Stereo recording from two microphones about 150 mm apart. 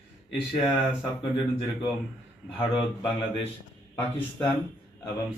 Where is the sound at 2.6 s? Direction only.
35° left (ahead or behind).